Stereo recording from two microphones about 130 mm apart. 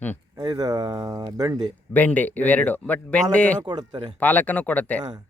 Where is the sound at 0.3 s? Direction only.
30° right (ahead or behind).